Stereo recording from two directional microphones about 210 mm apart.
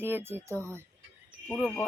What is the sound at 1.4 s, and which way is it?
Speech, 10° left (ahead or behind).